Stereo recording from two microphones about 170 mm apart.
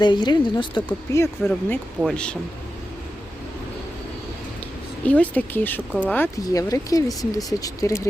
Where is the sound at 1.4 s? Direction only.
Centre (ahead or behind).